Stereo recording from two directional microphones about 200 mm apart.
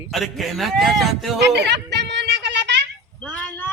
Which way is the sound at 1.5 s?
60° right (ahead or behind).